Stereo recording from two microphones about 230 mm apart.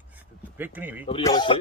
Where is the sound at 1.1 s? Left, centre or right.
Centre.